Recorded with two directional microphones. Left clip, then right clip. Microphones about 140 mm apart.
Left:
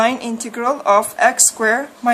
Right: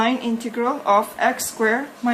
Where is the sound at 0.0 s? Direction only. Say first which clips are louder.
Left 4 dB; 45° left (ahead or behind).